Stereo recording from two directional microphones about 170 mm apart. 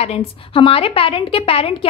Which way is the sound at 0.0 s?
35° left (ahead or behind).